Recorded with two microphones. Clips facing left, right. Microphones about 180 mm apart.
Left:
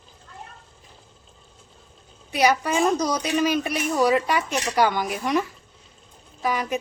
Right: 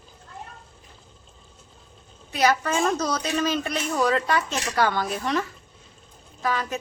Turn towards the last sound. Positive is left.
turn(degrees=15)  # may be behind; listen again after turning